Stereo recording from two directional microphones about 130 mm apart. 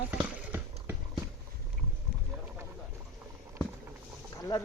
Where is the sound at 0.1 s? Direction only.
20° right (ahead or behind).